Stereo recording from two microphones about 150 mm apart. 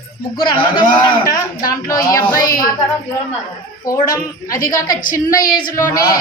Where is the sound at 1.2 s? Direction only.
25° left (ahead or behind).